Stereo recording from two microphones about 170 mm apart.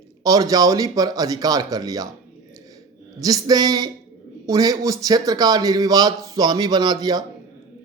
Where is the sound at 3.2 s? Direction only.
20° right (ahead or behind).